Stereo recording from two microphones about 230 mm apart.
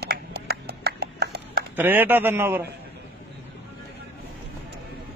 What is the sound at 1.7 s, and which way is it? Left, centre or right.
Speech, centre.